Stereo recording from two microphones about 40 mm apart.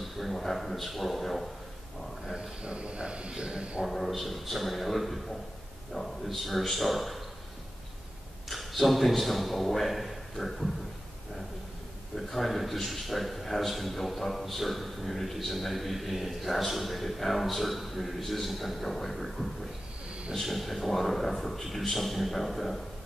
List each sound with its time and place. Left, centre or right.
0.2 s a man's voice: centre
2.3 s speech: right
3.8 s a man's voice: centre
8.5 s a man's voice: centre
12.2 s a man's voice: centre